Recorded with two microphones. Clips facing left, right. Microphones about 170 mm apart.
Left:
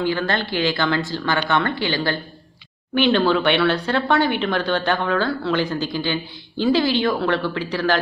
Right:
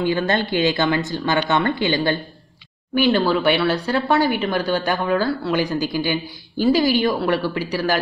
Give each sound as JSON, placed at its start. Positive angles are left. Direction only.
{"t": 0.0, "sound": "speech", "side_deg": -20}
{"t": 2.9, "sound": "speech", "side_deg": -5}